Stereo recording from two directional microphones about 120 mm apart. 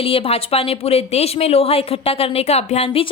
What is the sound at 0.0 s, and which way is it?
A woman's voice, 50° left (ahead or behind).